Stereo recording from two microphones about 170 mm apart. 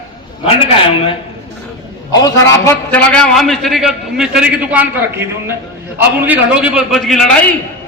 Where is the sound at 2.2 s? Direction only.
15° left (ahead or behind).